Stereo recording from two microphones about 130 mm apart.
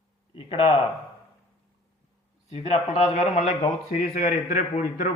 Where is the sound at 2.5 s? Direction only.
60° left (ahead or behind).